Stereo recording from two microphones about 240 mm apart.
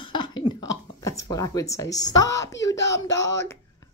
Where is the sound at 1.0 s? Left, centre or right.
Centre.